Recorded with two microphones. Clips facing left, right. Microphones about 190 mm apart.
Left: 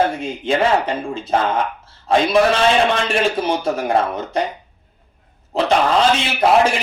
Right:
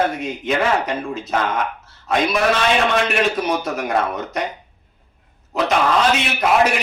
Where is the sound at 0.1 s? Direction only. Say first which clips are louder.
Left 2 dB; 30° left (ahead or behind).